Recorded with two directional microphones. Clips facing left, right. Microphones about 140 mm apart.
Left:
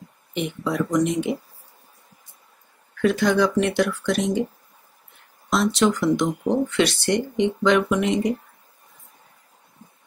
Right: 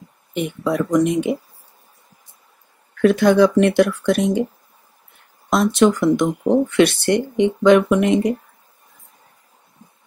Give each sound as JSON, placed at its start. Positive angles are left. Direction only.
{"t": 0.3, "sound": "speech", "side_deg": -55}
{"t": 3.0, "sound": "speech", "side_deg": -55}
{"t": 5.5, "sound": "speech", "side_deg": -50}